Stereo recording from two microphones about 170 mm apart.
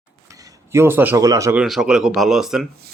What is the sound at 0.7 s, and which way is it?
Speech, 15° right (ahead or behind).